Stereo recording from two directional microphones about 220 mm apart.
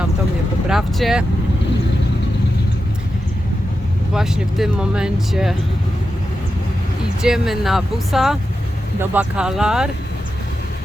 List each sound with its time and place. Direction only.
0.7 s speech: centre (ahead or behind)
4.1 s speech: centre (ahead or behind)
7.2 s speech: centre (ahead or behind)